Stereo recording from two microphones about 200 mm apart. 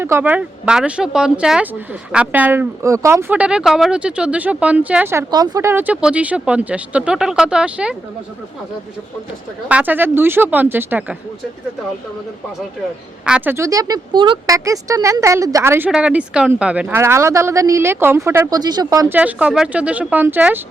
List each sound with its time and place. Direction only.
0.0 s speech: 10° right (ahead or behind)
9.6 s speech: 10° right (ahead or behind)
13.2 s speech: 5° right (ahead or behind)